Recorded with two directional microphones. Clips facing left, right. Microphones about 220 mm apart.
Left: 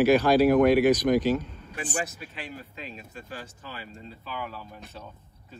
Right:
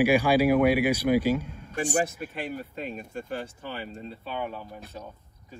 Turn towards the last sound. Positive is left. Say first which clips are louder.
# right 4 dB
turn(degrees=-25)  # may be behind; listen again after turning